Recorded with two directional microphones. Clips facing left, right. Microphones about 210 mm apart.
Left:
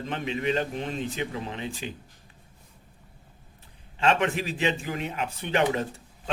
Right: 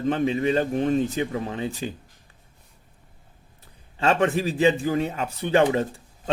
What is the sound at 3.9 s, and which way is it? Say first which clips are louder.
Speech: right 3 dB; 40° right (ahead or behind).